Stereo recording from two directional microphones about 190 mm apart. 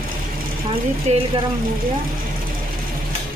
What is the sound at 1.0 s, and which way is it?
Speech, 30° right (ahead or behind).